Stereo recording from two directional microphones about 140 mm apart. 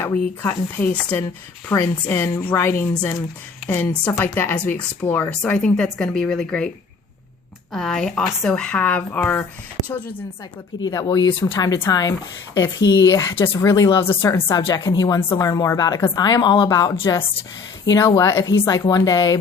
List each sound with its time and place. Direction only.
0.0 s speech: 15° left (ahead or behind)
7.7 s speech: 5° left (ahead or behind)
10.8 s a woman's voice: 25° left (ahead or behind)
14.0 s speech: 15° left (ahead or behind)
14.7 s a woman's voice: 25° left (ahead or behind)